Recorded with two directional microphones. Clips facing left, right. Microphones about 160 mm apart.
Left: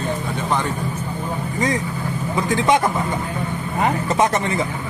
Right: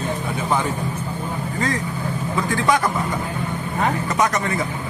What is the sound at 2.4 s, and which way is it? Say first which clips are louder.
Speech: left 3 dB; 20° left (ahead or behind).